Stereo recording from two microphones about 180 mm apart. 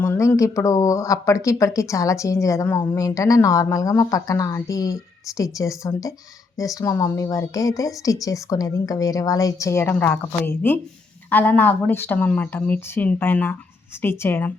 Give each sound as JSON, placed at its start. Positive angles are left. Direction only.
{"t": 0.0, "sound": "a woman's voice", "side_deg": 15}